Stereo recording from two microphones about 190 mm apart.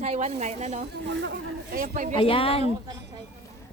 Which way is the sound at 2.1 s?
30° left (ahead or behind).